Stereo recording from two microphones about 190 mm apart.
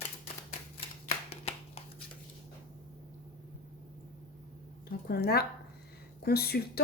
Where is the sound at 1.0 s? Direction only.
35° left (ahead or behind).